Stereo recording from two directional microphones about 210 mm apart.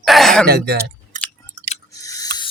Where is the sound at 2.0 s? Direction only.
15° left (ahead or behind).